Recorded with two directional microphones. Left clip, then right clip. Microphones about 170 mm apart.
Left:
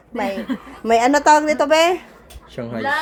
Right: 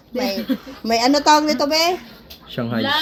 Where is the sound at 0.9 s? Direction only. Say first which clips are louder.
Left 2 dB; 20° left (ahead or behind).